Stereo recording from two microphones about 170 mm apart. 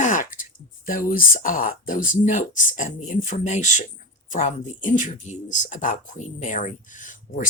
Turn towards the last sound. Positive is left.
turn(degrees=50)  # may be behind; listen again after turning